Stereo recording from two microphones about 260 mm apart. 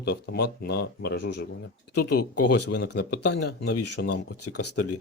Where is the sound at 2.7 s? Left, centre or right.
Left.